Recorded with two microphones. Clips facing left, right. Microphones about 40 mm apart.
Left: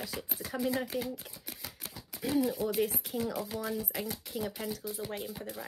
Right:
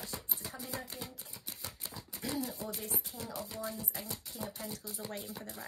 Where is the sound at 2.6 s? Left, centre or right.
Left.